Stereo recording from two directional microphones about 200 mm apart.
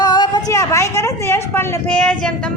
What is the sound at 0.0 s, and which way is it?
A woman's voice, 20° left (ahead or behind).